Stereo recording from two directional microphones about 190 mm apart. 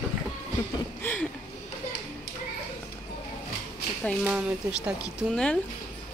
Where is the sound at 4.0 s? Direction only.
5° left (ahead or behind).